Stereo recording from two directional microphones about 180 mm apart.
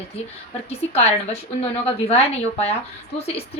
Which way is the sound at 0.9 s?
35° left (ahead or behind).